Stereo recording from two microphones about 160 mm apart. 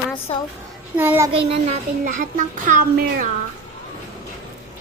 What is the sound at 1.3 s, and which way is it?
Speech, 35° right (ahead or behind).